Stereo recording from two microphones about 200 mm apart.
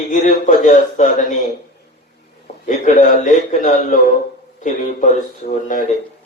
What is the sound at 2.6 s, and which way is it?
A man's voice, 40° left (ahead or behind).